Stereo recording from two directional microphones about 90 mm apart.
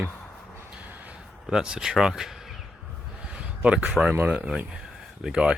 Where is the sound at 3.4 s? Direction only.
15° right (ahead or behind).